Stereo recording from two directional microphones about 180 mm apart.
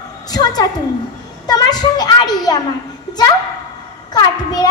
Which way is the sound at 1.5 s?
20° left (ahead or behind).